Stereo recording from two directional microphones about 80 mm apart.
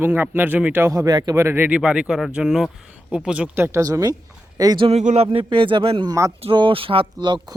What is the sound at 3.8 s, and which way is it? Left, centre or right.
Speech, right.